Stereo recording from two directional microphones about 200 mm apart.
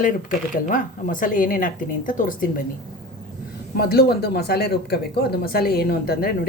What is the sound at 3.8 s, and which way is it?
Speech, 50° left (ahead or behind).